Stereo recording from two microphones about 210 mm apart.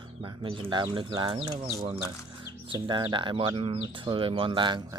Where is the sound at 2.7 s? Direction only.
20° right (ahead or behind).